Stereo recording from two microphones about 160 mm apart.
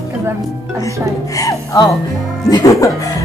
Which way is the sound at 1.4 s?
20° left (ahead or behind).